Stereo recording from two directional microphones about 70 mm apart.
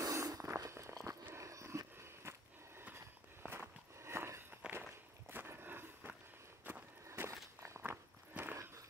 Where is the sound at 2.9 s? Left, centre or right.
Right.